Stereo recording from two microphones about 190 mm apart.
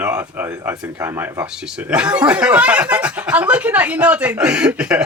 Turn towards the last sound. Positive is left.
turn(degrees=-5)  # may be behind; listen again after turning